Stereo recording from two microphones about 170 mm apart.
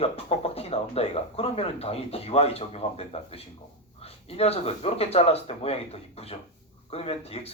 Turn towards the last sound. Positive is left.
turn(degrees=35)  # may be behind; listen again after turning